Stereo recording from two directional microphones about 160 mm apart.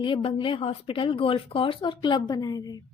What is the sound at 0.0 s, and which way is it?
Speech, 35° left (ahead or behind).